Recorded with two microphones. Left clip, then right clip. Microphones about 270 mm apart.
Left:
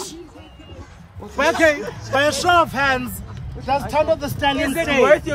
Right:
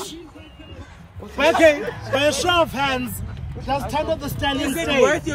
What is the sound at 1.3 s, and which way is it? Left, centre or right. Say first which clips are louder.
Speech: right 1 dB; centre.